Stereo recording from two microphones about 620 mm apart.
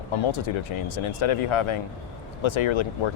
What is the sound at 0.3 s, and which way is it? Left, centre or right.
Speech, left.